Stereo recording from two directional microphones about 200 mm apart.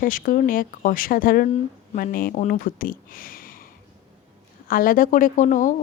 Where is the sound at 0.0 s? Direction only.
45° left (ahead or behind).